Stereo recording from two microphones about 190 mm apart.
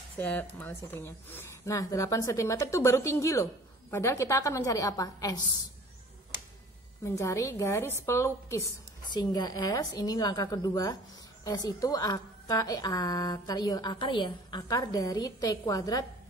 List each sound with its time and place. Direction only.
0.2 s a woman's voice: 10° left (ahead or behind)
7.2 s a woman's voice: 15° left (ahead or behind)